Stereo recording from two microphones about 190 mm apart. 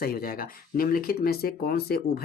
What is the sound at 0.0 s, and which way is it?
Speech, 50° left (ahead or behind).